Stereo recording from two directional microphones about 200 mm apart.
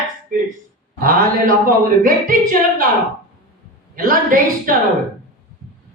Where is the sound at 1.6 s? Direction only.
45° right (ahead or behind).